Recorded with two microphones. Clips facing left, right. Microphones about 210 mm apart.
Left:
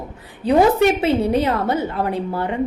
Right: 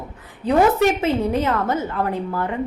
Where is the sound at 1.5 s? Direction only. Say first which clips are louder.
Left 2 dB; 30° left (ahead or behind).